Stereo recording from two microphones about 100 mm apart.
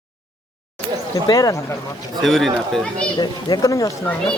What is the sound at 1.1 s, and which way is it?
Speech, 35° left (ahead or behind).